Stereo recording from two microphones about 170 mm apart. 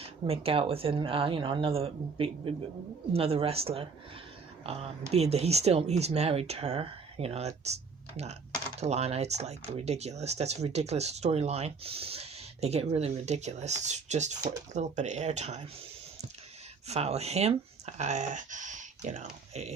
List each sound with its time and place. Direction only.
0.0 s speech: 35° right (ahead or behind)
16.8 s speech: 40° right (ahead or behind)